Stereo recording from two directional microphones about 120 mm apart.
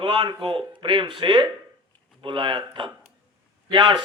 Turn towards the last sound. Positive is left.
turn(degrees=-45)  # may be behind; listen again after turning